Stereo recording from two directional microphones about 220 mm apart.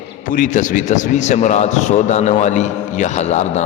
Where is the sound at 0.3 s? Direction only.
35° left (ahead or behind).